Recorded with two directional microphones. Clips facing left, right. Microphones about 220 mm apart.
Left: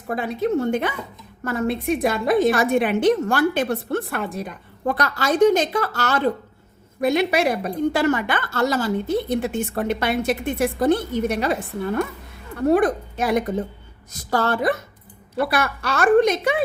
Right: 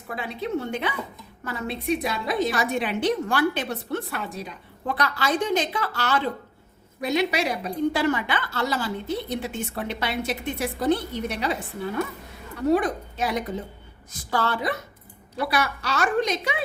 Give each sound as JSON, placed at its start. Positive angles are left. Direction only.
{"t": 0.1, "sound": "a woman's voice", "side_deg": 45}
{"t": 12.5, "sound": "a woman's voice", "side_deg": 55}